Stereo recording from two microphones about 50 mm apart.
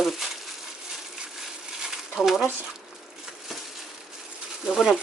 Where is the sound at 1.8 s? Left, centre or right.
Centre.